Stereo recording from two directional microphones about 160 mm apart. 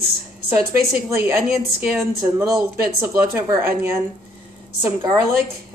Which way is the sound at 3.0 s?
15° right (ahead or behind).